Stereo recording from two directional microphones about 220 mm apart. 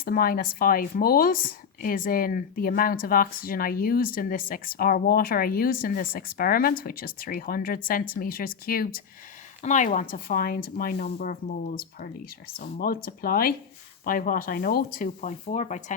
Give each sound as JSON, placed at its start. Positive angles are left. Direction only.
{"t": 0.0, "sound": "speech", "side_deg": 40}